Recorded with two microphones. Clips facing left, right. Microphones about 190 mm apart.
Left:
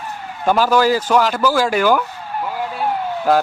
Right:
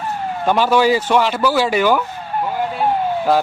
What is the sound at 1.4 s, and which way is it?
Speech, 10° right (ahead or behind).